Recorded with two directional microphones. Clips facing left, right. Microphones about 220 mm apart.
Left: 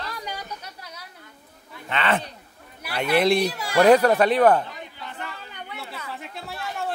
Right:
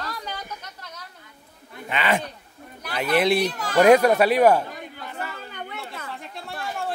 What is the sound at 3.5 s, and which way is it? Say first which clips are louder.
Speech: right 1 dB; 10° left (ahead or behind).